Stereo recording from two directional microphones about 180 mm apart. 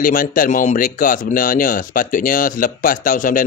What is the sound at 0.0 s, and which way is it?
Speech, 50° left (ahead or behind).